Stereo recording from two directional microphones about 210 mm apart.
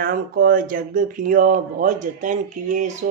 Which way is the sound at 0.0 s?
45° right (ahead or behind).